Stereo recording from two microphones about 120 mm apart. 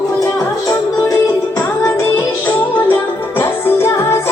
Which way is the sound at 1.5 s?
15° left (ahead or behind).